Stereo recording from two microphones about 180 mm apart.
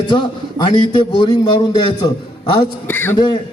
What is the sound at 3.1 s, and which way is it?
Speech, 25° left (ahead or behind).